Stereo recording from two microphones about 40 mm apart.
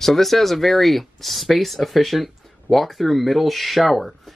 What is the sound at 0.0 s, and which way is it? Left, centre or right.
Speech, centre.